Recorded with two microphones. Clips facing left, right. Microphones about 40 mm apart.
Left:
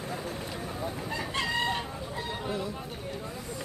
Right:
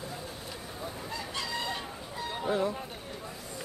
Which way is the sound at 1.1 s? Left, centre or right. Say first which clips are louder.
Left 5 dB; left.